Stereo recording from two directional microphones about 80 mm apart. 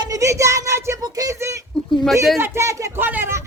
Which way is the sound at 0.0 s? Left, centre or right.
Right.